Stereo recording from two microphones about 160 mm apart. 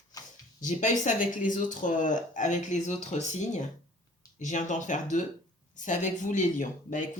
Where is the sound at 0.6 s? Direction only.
50° left (ahead or behind).